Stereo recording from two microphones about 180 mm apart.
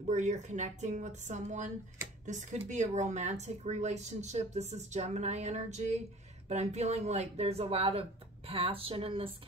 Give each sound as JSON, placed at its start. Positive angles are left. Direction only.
{"t": 0.0, "sound": "a woman's voice", "side_deg": -40}